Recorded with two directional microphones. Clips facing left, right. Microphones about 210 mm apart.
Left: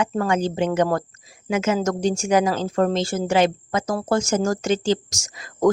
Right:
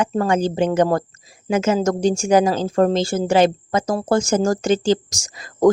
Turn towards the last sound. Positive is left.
turn(degrees=-35)  # may be behind; listen again after turning